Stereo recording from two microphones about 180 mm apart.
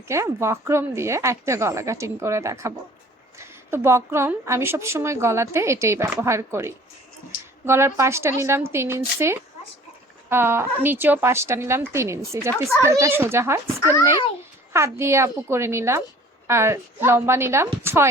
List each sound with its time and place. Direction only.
0.1 s a woman's voice: 15° right (ahead or behind)